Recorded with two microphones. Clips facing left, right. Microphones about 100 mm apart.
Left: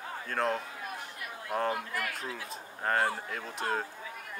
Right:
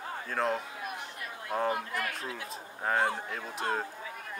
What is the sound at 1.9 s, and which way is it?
Speech, 20° right (ahead or behind).